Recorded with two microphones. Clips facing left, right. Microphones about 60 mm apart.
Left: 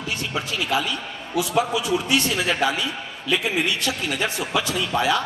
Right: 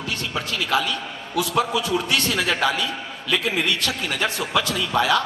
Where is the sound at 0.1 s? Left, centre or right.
Left.